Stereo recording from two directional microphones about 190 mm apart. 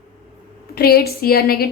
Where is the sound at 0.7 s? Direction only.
55° left (ahead or behind).